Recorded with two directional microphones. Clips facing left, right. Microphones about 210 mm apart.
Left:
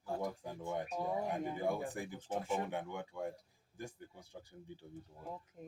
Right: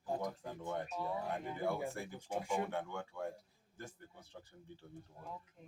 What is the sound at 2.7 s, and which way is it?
Speech, 15° left (ahead or behind).